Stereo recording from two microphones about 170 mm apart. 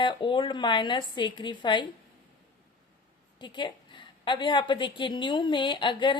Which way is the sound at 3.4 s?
25° left (ahead or behind).